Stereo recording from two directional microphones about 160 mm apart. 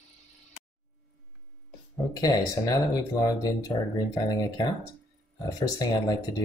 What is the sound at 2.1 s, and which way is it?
Speech, 25° left (ahead or behind).